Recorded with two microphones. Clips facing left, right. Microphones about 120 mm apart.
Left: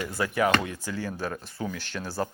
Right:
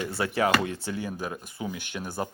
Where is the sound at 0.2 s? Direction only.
30° right (ahead or behind).